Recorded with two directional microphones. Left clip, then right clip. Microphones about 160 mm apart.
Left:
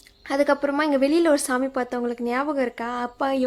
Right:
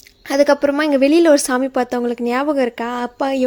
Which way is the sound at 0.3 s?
25° right (ahead or behind).